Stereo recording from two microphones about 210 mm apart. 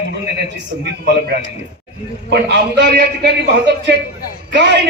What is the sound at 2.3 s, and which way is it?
A man's voice, 55° right (ahead or behind).